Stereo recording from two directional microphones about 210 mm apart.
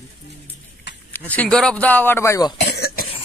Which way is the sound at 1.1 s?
10° left (ahead or behind).